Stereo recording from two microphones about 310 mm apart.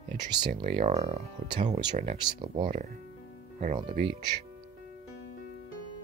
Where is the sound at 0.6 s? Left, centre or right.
Right.